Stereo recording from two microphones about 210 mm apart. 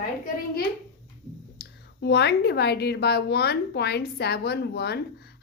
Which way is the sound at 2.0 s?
50° left (ahead or behind).